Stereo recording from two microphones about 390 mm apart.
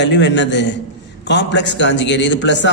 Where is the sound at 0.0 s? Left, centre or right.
Left.